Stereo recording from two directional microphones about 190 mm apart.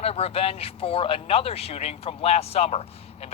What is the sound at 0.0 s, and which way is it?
Speech, 30° left (ahead or behind).